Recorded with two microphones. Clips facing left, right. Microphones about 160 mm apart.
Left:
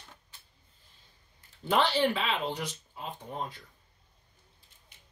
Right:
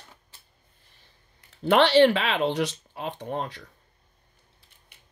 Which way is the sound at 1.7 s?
75° right (ahead or behind).